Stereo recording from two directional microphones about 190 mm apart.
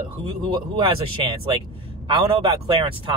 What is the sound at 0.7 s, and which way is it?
A man's voice, 25° right (ahead or behind).